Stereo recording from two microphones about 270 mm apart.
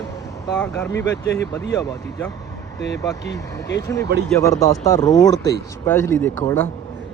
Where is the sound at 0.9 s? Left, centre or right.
Left.